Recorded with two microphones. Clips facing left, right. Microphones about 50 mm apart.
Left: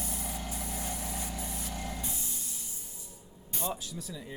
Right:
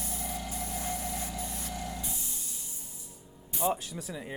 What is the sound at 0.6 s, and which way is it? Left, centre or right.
Vehicle, right.